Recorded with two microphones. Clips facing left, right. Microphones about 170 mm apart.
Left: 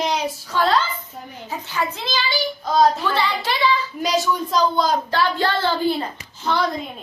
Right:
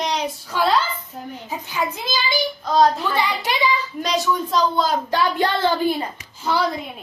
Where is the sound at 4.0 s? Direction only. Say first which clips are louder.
Right 1 dB; centre (ahead or behind).